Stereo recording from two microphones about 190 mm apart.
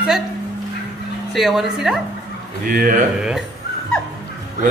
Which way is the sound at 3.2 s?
5° right (ahead or behind).